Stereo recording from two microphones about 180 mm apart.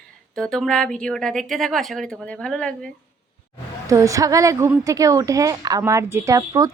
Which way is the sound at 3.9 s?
20° right (ahead or behind).